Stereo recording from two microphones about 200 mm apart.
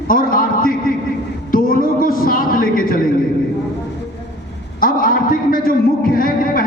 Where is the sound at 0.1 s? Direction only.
45° left (ahead or behind).